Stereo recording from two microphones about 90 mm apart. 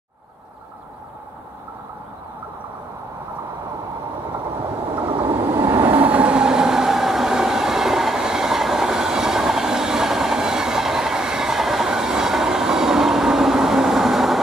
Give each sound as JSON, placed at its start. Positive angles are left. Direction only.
{"t": 4.9, "sound": "vehicle", "side_deg": -60}
{"t": 5.9, "sound": "train", "side_deg": -15}